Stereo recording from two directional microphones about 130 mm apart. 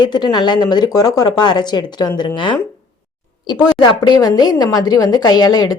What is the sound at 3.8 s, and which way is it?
A woman's voice, 35° left (ahead or behind).